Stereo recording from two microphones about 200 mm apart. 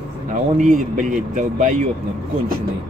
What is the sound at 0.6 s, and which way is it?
Speech, 40° right (ahead or behind).